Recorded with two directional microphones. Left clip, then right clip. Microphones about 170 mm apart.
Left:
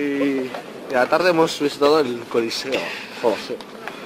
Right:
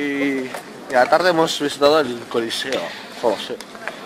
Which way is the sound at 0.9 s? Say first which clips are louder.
Right 2 dB; 10° right (ahead or behind).